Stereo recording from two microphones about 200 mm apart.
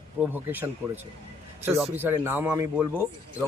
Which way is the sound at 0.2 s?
10° right (ahead or behind).